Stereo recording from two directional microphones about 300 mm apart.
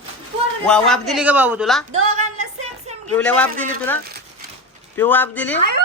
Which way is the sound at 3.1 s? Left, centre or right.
Centre.